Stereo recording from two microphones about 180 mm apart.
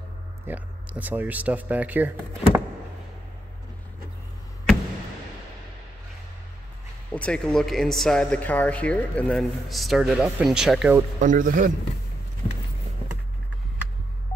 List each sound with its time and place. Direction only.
0.5 s speech: 10° right (ahead or behind)
7.1 s speech: 5° left (ahead or behind)
11.1 s speech: 45° right (ahead or behind)